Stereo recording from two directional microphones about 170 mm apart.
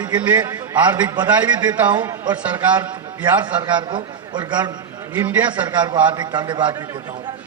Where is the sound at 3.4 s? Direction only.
25° right (ahead or behind).